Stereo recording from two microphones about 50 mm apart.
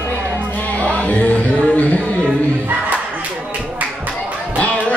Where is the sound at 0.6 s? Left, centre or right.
Left.